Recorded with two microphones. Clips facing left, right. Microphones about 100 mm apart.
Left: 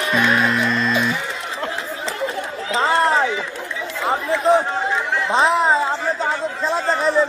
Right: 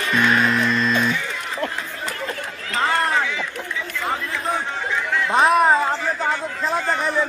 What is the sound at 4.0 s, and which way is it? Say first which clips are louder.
Chatter: left 7 dB; 25° left (ahead or behind).